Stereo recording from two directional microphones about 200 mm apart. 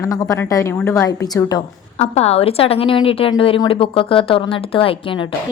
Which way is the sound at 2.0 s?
30° left (ahead or behind).